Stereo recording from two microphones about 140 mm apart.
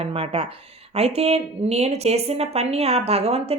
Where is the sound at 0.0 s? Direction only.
45° right (ahead or behind).